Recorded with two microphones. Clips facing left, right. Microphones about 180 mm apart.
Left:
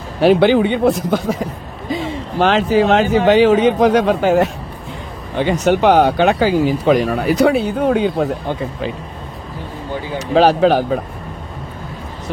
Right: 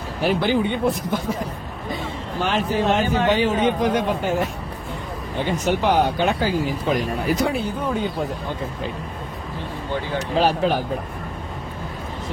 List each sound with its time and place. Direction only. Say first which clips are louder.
0.2 s speech: left 9 dB; 80° left
1.9 s speech: left 7 dB; 90° left; by 8.3 s 75° left (ahead or behind)
10.3 s speech: left 8 dB; 80° left